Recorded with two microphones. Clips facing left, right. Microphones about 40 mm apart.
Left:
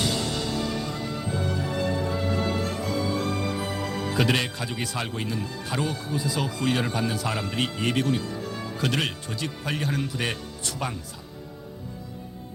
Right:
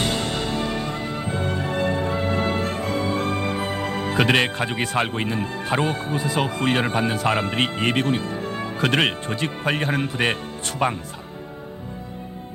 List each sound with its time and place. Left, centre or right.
0.0 s music: right